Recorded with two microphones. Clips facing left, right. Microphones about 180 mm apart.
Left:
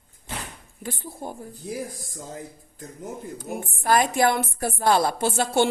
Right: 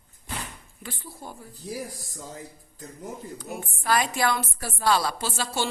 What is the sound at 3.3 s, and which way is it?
A woman's voice, 50° left (ahead or behind).